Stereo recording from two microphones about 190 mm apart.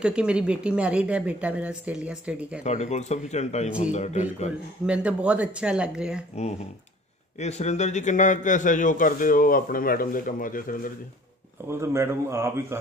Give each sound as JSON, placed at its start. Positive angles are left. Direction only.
{"t": 0.0, "sound": "speech", "side_deg": -5}
{"t": 2.6, "sound": "speech", "side_deg": 35}
{"t": 4.8, "sound": "speech", "side_deg": -5}
{"t": 6.3, "sound": "a man's voice", "side_deg": 35}
{"t": 11.7, "sound": "a man's voice", "side_deg": -15}